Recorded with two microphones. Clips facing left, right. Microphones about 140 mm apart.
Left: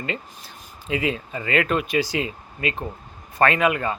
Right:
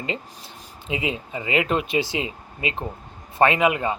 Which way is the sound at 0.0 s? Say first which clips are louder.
Even; 20° right (ahead or behind).